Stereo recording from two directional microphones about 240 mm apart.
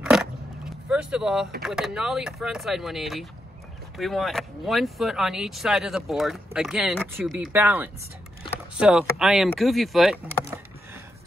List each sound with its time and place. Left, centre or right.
0.0 s vehicle: centre
1.6 s speech: centre